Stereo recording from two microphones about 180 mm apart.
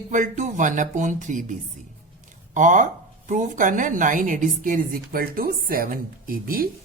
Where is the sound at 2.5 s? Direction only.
45° right (ahead or behind).